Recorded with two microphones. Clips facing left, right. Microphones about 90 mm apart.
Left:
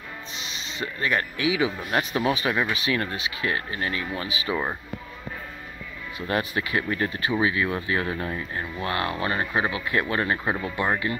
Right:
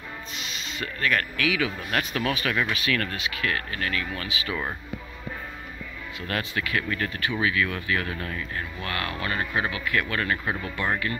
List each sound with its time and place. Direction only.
0.4 s speech: 25° left (ahead or behind)
6.1 s speech: 25° left (ahead or behind)